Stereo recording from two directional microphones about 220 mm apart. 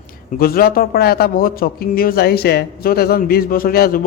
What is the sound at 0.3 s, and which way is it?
A man's voice, 45° left (ahead or behind).